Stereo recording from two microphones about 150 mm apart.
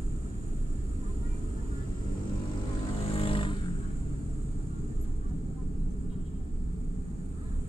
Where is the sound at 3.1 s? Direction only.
35° left (ahead or behind).